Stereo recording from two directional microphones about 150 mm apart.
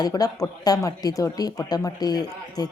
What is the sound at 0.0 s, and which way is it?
A woman's voice, 25° left (ahead or behind).